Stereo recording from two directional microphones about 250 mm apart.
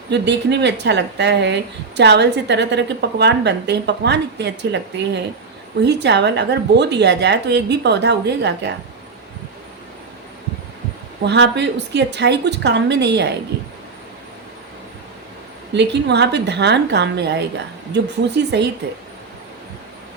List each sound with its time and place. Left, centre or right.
0.1 s speech: right
11.2 s speech: right
15.7 s speech: right